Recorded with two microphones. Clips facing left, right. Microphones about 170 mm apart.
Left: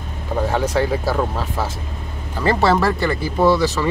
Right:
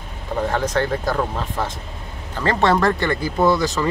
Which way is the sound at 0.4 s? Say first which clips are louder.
Left 2 dB; 10° left (ahead or behind).